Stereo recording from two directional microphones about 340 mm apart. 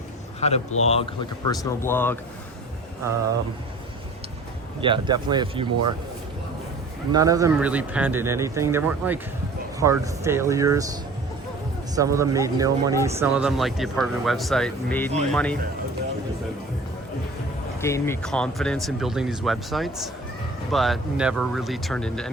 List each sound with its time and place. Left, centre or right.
0.3 s speech: centre
4.8 s speech: centre
7.1 s speech: centre
11.9 s speech: centre
17.7 s speech: centre